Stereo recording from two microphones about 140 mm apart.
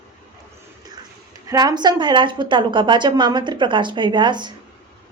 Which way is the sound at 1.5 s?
30° right (ahead or behind).